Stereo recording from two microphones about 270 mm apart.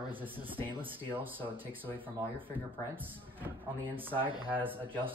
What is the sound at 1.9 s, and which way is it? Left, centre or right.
Speech, centre.